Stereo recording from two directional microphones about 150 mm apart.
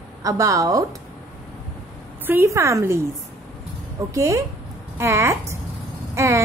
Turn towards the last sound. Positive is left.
turn(degrees=-20)  # may be behind; listen again after turning